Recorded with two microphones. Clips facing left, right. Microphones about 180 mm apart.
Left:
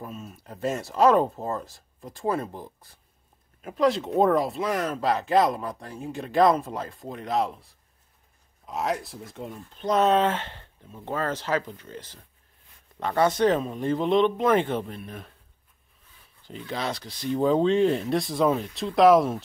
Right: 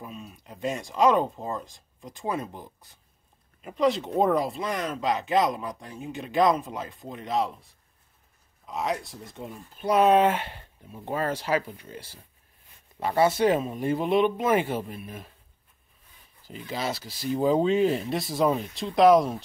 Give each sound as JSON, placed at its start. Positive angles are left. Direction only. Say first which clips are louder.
{"t": 0.0, "sound": "speech", "louder": "left 2 dB", "side_deg": 0}
{"t": 16.4, "sound": "speech", "louder": "even", "side_deg": -5}